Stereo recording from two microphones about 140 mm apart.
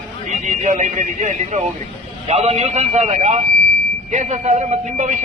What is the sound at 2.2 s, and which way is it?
Speech, 50° right (ahead or behind).